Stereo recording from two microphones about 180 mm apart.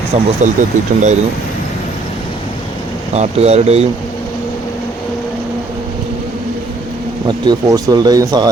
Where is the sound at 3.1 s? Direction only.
35° right (ahead or behind).